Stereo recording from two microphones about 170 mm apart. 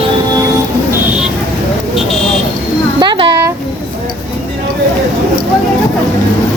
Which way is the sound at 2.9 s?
25° right (ahead or behind).